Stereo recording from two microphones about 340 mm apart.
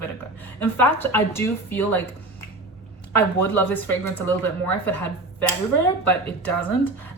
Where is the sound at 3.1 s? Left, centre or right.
Centre.